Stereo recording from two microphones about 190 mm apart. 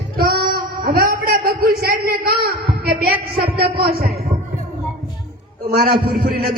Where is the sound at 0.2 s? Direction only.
50° right (ahead or behind).